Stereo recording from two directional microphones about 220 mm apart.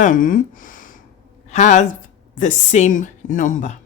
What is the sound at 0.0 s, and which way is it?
Gasp, 35° left (ahead or behind).